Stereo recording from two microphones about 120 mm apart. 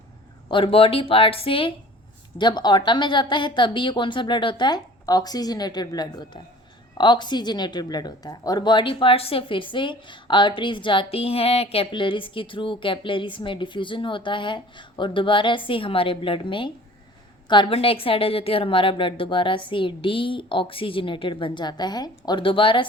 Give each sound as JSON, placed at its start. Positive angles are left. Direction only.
{"t": 0.4, "sound": "a woman's voice", "side_deg": 45}
{"t": 2.4, "sound": "a woman's voice", "side_deg": 35}